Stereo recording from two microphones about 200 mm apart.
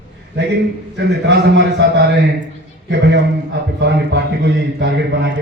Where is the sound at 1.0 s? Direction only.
60° right (ahead or behind).